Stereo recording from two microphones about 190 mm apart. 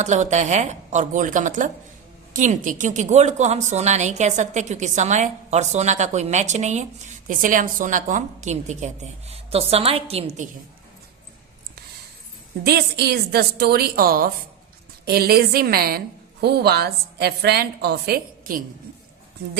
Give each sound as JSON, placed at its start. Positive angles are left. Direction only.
{"t": 0.0, "sound": "speech", "side_deg": -40}
{"t": 12.6, "sound": "a woman's voice", "side_deg": -55}